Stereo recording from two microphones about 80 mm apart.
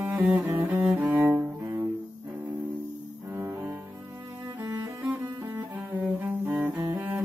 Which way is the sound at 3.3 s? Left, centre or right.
Right.